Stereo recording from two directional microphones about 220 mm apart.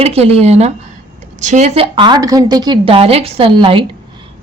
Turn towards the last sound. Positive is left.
turn(degrees=-25)  # may be behind; listen again after turning